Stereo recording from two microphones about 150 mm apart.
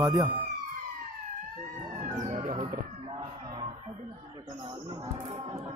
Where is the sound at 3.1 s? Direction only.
30° right (ahead or behind).